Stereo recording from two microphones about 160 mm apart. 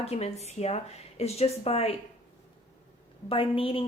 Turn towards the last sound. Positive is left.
turn(degrees=35)  # may be behind; listen again after turning